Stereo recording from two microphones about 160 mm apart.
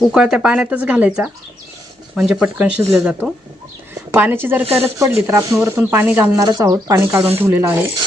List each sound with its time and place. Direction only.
0.0 s speech: 5° right (ahead or behind)
6.3 s speech: 25° right (ahead or behind)